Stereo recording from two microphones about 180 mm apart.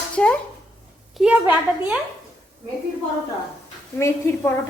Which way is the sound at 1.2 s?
10° right (ahead or behind).